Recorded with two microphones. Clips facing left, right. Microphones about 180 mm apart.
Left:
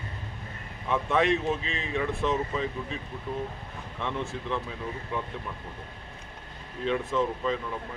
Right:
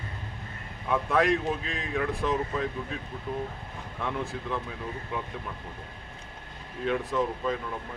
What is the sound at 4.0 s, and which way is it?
Speech, 5° right (ahead or behind).